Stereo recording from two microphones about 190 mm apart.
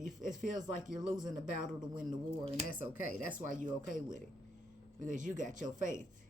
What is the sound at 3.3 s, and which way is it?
Speech, 45° right (ahead or behind).